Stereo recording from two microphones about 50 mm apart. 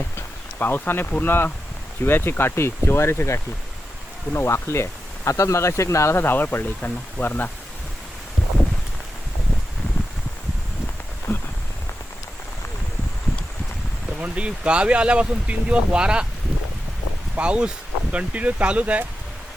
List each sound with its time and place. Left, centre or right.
0.6 s speech: left
2.4 s speech: left
6.1 s speech: left
11.3 s a sound: left
14.2 s speech: right
17.3 s speech: right